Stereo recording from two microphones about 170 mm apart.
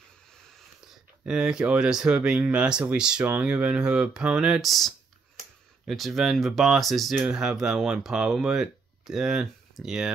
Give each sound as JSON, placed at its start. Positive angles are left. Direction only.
{"t": 1.2, "sound": "speech", "side_deg": -5}